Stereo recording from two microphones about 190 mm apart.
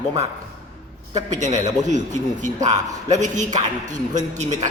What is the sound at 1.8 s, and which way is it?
A man's voice, 40° right (ahead or behind).